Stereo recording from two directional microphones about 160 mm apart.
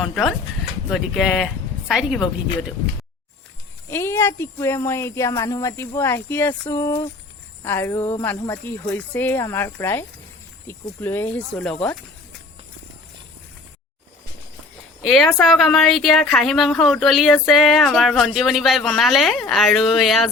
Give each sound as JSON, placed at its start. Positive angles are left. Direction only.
{"t": 0.0, "sound": "a woman's voice", "side_deg": 0}
{"t": 3.8, "sound": "speech", "side_deg": 15}
{"t": 15.0, "sound": "a woman's voice", "side_deg": 0}